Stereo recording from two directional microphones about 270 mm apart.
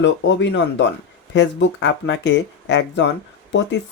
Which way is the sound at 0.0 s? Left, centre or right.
Left.